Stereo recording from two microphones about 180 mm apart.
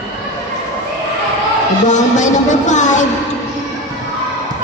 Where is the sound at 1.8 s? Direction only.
40° left (ahead or behind).